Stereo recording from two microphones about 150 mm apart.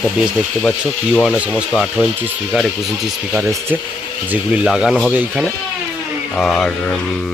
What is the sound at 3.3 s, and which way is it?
Speech, 15° right (ahead or behind).